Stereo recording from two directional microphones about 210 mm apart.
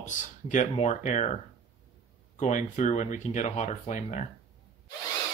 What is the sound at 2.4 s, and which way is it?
Speech, 35° left (ahead or behind).